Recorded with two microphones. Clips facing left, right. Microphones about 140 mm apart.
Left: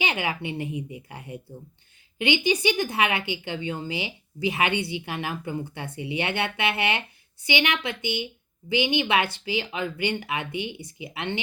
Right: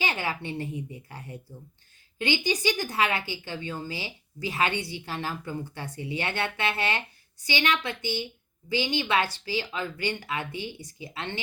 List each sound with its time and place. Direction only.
0.0 s a woman's voice: 20° left (ahead or behind)